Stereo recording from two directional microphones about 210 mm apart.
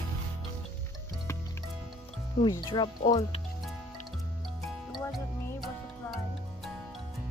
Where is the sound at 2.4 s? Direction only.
20° left (ahead or behind).